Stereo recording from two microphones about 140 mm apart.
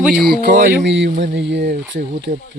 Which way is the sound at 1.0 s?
90° right.